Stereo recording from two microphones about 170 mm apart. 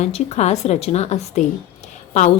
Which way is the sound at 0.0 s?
40° left (ahead or behind).